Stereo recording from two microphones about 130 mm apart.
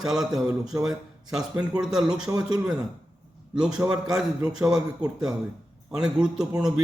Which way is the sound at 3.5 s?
5° right (ahead or behind).